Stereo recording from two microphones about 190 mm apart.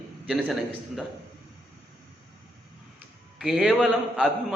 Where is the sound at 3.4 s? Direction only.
Centre (ahead or behind).